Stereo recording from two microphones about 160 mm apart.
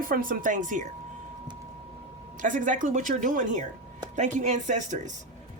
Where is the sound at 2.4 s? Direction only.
55° right (ahead or behind).